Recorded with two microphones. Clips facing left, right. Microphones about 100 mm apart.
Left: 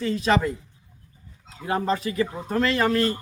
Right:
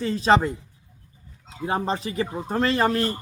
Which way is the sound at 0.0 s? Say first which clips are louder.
Right 3 dB; 30° right (ahead or behind).